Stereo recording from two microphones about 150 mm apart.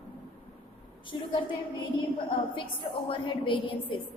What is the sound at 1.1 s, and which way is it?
Speech, 35° left (ahead or behind).